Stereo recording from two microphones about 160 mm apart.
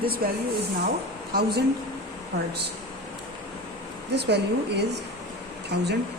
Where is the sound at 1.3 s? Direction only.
85° right.